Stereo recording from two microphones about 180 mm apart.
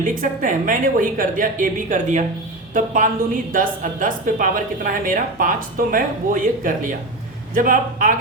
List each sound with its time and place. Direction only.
0.0 s speech: 45° right (ahead or behind)